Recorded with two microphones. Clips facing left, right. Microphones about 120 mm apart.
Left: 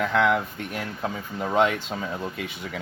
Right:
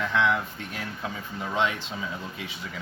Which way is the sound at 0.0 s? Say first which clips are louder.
Left 3 dB; 55° left (ahead or behind).